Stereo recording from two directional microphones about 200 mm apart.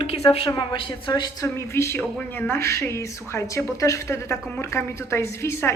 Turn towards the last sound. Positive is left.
turn(degrees=15)  # may be behind; listen again after turning